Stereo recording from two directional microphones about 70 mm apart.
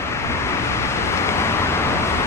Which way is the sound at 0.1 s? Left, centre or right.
Left.